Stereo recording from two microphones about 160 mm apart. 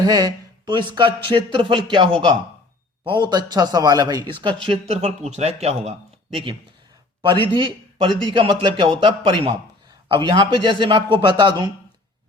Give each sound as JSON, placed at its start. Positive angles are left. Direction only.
{"t": 0.0, "sound": "a man's voice", "side_deg": -25}